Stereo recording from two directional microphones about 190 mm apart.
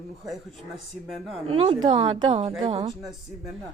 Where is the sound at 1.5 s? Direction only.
30° right (ahead or behind).